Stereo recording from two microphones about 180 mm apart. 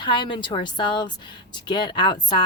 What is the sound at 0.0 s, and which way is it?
Speech, 25° left (ahead or behind).